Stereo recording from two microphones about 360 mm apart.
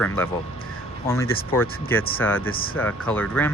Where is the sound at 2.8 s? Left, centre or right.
Centre.